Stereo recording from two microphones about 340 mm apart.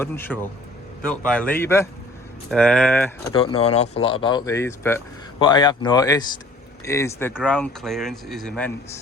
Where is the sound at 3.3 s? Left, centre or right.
Centre.